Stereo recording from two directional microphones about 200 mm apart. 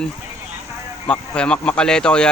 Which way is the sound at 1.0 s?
5° left (ahead or behind).